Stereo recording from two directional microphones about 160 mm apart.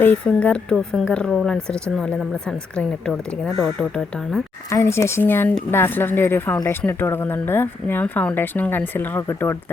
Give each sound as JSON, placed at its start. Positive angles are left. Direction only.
{"t": 0.0, "sound": "a woman's voice", "side_deg": 10}
{"t": 4.7, "sound": "speech", "side_deg": 15}